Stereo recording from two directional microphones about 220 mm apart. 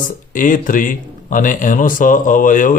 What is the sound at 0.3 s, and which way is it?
Speech, 35° left (ahead or behind).